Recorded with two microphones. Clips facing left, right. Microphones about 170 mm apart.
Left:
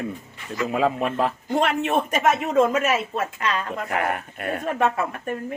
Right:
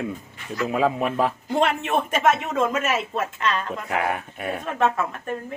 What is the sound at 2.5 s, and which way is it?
Speech, 45° left (ahead or behind).